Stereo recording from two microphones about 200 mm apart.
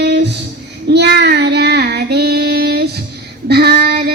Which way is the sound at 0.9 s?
55° right (ahead or behind).